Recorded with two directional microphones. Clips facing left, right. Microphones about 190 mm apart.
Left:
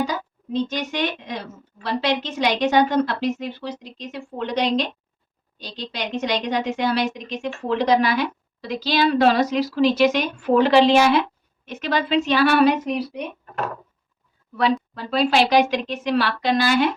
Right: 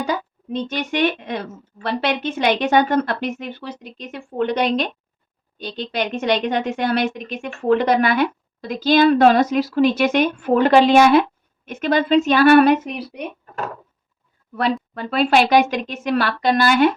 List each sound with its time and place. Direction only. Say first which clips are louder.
0.0 s a woman's voice: right 1 dB; 60° right (ahead or behind)
12.7 s a woman's voice: right 3 dB; 5° right (ahead or behind)
14.9 s a woman's voice: right 5 dB; 50° right (ahead or behind)